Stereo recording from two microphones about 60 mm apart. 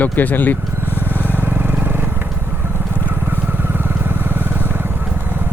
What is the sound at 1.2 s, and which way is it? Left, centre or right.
Vehicle, right.